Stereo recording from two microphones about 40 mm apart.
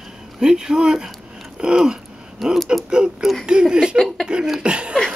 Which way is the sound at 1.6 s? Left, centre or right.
Right.